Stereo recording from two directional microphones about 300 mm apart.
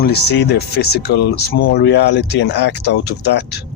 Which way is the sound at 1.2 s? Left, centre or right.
Left.